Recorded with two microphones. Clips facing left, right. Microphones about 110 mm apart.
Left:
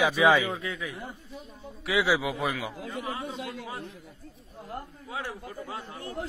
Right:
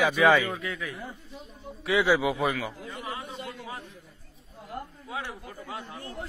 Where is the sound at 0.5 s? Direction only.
25° left (ahead or behind).